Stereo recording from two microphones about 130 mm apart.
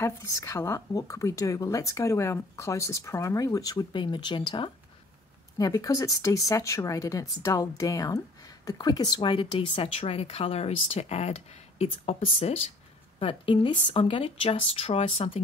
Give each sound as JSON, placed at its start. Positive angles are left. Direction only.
{"t": 0.0, "sound": "speech", "side_deg": 25}
{"t": 5.6, "sound": "speech", "side_deg": 25}